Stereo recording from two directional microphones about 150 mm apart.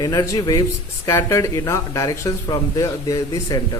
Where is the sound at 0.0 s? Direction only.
25° left (ahead or behind).